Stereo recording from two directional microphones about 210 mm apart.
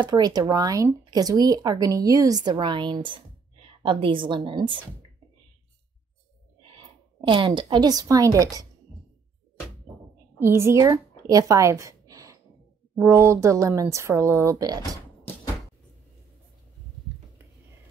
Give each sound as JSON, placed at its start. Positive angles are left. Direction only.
{"t": 0.0, "sound": "speech", "side_deg": -20}
{"t": 7.2, "sound": "speech", "side_deg": -25}
{"t": 10.4, "sound": "speech", "side_deg": -10}